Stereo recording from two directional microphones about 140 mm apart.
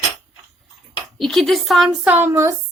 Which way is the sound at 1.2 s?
5° left (ahead or behind).